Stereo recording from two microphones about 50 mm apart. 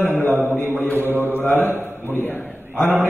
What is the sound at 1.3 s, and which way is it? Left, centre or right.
A man's voice, left.